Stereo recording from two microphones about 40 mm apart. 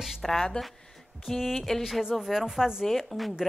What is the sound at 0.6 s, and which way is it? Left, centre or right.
Speech, left.